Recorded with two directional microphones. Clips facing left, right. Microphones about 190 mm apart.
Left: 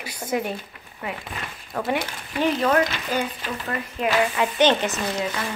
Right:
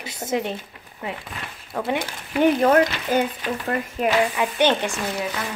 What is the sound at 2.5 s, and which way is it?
Speech, 45° right (ahead or behind).